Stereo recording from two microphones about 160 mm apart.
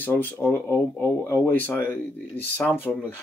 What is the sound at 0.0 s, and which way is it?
Speech, 10° left (ahead or behind).